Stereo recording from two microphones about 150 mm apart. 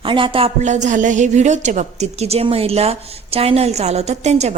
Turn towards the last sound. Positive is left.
turn(degrees=-50)  # may be behind; listen again after turning